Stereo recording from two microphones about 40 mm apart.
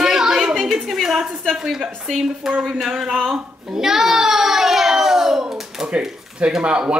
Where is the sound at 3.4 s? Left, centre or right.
Centre.